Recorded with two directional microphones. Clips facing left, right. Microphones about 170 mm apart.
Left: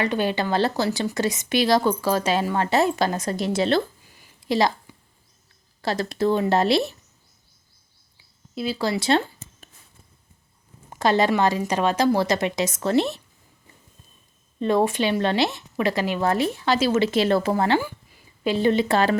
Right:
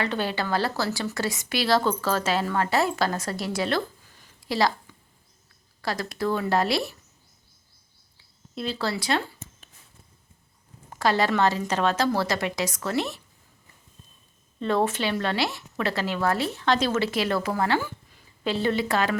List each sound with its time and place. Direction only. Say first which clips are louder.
0.0 s a woman's voice: left 4 dB; 15° left (ahead or behind)
4.1 s a sound: left 6 dB; 15° left (ahead or behind)
5.8 s a woman's voice: left 5 dB; 25° left (ahead or behind)
8.5 s speech: left 4 dB; 10° left (ahead or behind)
9.0 s a woman's voice: left 8 dB; 30° left (ahead or behind)
10.8 s a woman's voice: left 3 dB; 20° left (ahead or behind)
14.6 s speech: left 4 dB; 15° left (ahead or behind)
16.9 s a woman's voice: left 5 dB; 25° left (ahead or behind)
18.4 s a woman's voice: left 5 dB; 15° left (ahead or behind)